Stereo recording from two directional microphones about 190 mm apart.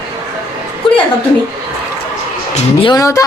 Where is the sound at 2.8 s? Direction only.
20° left (ahead or behind).